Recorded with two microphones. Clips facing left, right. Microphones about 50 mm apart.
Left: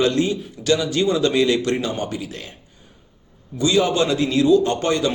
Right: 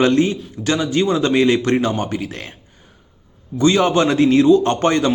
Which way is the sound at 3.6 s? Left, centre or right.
Right.